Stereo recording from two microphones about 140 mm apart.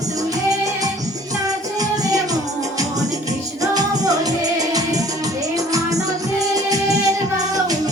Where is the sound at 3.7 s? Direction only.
25° right (ahead or behind).